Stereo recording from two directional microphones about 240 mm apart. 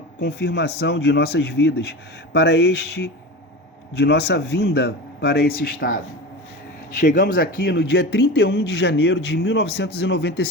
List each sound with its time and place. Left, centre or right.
0.2 s speech: left
7.1 s speech: left